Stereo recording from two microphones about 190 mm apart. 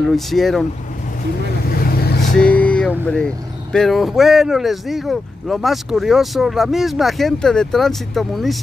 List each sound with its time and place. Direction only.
0.1 s speech: centre (ahead or behind)
1.8 s vehicle: 55° left (ahead or behind)
2.3 s vehicle: 5° left (ahead or behind)
3.1 s speech: 5° left (ahead or behind)